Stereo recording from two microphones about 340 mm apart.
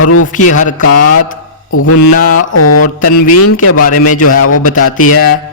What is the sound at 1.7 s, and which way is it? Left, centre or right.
Mantra, left.